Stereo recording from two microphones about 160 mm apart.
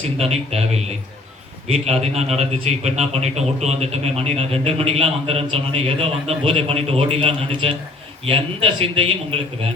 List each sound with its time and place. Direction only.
0.2 s a man's voice: 40° right (ahead or behind)